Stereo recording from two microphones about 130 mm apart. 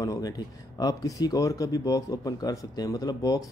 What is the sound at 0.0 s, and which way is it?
Speech, 25° left (ahead or behind).